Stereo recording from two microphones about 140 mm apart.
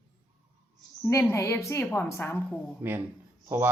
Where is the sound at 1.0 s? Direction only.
15° left (ahead or behind).